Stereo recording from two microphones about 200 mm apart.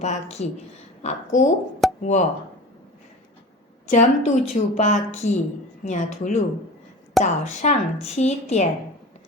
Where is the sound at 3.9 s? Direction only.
35° left (ahead or behind).